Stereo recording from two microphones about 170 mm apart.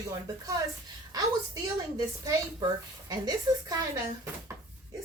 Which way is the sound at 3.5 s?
25° right (ahead or behind).